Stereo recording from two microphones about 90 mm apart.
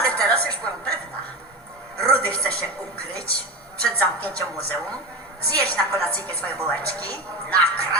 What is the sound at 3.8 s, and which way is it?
Speech, 15° left (ahead or behind).